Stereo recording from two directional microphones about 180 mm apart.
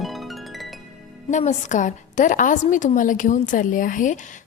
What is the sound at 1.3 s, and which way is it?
A woman's voice, 40° left (ahead or behind).